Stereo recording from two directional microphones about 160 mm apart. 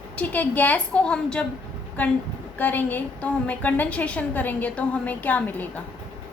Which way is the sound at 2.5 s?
10° left (ahead or behind).